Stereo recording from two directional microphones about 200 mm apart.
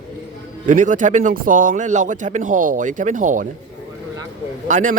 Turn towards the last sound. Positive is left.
turn(degrees=-40)  # may be behind; listen again after turning